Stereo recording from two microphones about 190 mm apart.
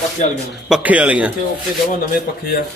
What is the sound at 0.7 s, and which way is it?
Speech, 10° right (ahead or behind).